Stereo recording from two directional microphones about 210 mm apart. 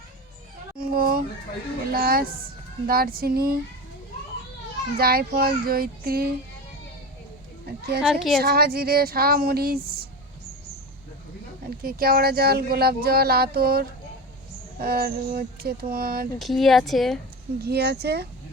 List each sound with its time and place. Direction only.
0.8 s a sound: 45° right (ahead or behind)
1.9 s speech: 45° right (ahead or behind)
4.9 s speech: 45° right (ahead or behind)
8.0 s a woman's voice: centre (ahead or behind)
8.4 s speech: 45° right (ahead or behind)
11.8 s speech: 45° right (ahead or behind)
16.4 s a woman's voice: centre (ahead or behind)
17.6 s speech: 50° right (ahead or behind)